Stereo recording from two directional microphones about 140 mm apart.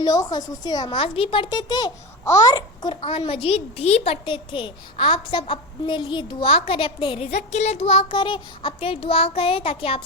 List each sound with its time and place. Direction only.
0.0 s a child's voice: 25° left (ahead or behind)
7.3 s a child's voice: 55° left (ahead or behind)